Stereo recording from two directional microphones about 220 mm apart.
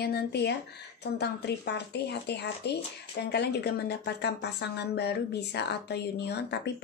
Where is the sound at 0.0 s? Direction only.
45° left (ahead or behind).